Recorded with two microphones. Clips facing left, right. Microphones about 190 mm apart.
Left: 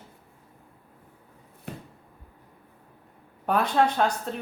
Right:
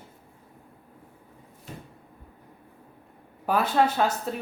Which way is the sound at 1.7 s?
60° left (ahead or behind).